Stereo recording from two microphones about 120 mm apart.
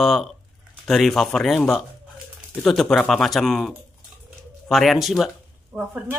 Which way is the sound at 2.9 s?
Centre (ahead or behind).